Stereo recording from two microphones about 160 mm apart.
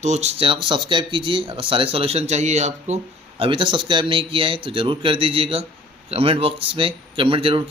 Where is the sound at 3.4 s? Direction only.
30° right (ahead or behind).